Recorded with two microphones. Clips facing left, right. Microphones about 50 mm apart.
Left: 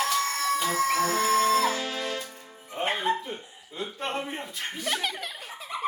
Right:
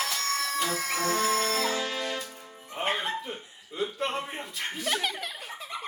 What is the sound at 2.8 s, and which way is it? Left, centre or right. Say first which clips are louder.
Music: left 3 dB; centre.